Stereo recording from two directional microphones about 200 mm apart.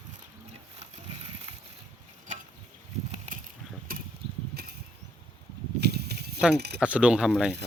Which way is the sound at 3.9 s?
45° right (ahead or behind).